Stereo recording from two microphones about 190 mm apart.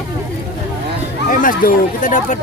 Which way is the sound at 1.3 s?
45° left (ahead or behind).